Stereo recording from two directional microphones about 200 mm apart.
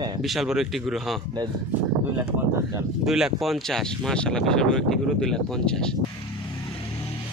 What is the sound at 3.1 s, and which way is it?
Speech, centre (ahead or behind).